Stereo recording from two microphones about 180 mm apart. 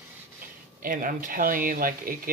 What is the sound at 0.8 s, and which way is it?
Speech, 50° right (ahead or behind).